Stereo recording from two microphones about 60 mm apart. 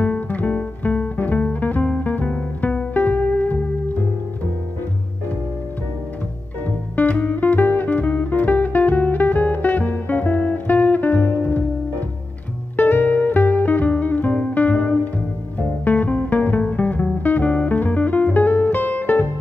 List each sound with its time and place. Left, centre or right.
0.0 s music: left
6.6 s music: left
12.7 s music: left
15.8 s guitar: left
16.7 s music: left